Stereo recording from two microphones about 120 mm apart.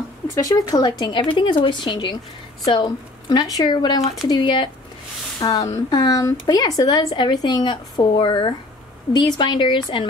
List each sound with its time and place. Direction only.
0.3 s a woman's voice: 30° left (ahead or behind)